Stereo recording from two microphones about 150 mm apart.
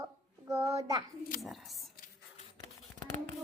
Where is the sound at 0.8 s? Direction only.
25° right (ahead or behind).